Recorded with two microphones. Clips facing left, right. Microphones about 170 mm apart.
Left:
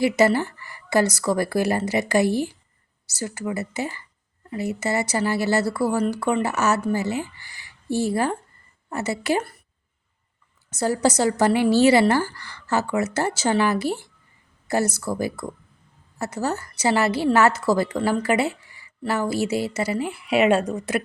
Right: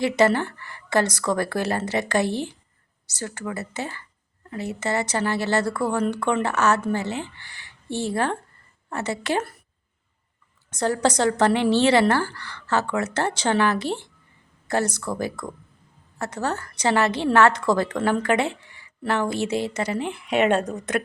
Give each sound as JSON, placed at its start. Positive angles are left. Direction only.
{"t": 0.0, "sound": "a woman's voice", "side_deg": 10}
{"t": 10.7, "sound": "a woman's voice", "side_deg": 10}